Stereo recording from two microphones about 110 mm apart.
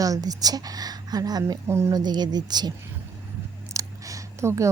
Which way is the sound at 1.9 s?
40° right (ahead or behind).